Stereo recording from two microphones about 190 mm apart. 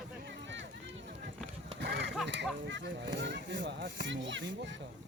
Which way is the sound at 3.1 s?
70° right (ahead or behind).